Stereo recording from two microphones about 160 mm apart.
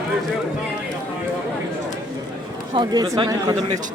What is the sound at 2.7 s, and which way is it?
A man's voice, 25° right (ahead or behind).